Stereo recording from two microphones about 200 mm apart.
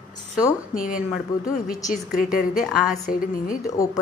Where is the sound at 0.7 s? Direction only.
45° left (ahead or behind).